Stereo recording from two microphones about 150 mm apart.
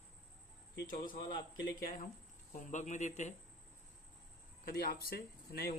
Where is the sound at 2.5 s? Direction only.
55° left (ahead or behind).